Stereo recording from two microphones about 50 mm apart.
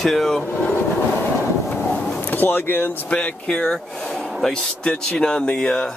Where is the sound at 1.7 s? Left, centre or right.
Left.